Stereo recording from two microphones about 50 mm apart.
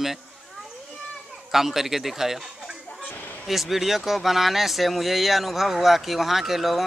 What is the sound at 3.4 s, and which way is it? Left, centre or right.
Speech, centre.